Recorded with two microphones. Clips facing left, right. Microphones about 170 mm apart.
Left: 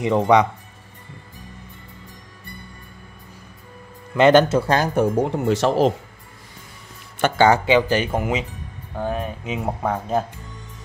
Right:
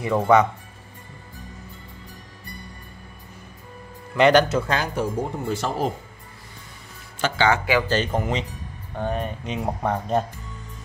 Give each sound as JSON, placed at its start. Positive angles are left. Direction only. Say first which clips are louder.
{"t": 0.0, "sound": "speech", "louder": "left 2 dB", "side_deg": 20}
{"t": 4.5, "sound": "speech", "louder": "left 5 dB", "side_deg": 35}
{"t": 4.9, "sound": "speech", "louder": "left 6 dB", "side_deg": 65}
{"t": 7.2, "sound": "speech", "louder": "left 6 dB", "side_deg": 55}
{"t": 7.6, "sound": "speech", "louder": "left 4 dB", "side_deg": 20}